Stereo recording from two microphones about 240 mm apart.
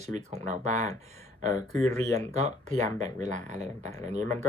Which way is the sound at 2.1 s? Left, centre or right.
Right.